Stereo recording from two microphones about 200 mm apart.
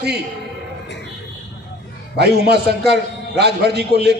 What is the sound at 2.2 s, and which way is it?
A man's voice, 55° right (ahead or behind).